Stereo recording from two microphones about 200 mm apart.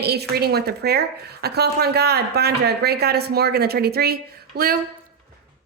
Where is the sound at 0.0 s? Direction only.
55° right (ahead or behind).